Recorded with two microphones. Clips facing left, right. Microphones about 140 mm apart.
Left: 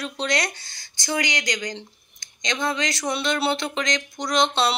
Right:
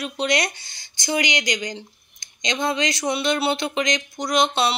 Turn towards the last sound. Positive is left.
turn(degrees=-10)  # may be behind; listen again after turning